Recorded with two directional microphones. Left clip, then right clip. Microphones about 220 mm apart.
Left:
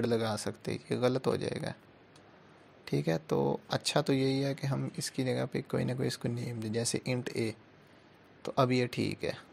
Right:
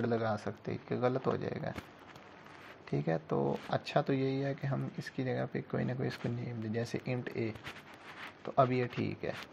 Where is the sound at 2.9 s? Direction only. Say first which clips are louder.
Left 3 dB; 55° left (ahead or behind).